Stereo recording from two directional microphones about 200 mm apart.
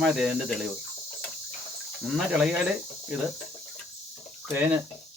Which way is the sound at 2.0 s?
5° right (ahead or behind).